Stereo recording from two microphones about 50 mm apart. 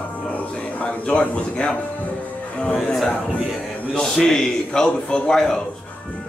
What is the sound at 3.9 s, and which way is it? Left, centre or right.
A man's voice, centre.